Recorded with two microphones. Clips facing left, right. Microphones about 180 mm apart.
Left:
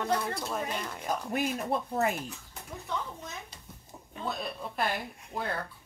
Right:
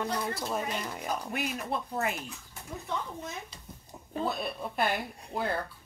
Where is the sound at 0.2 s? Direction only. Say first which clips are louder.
Right 1 dB; 5° right (ahead or behind).